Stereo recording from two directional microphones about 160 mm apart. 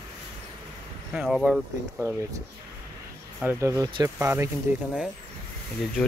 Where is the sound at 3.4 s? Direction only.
20° right (ahead or behind).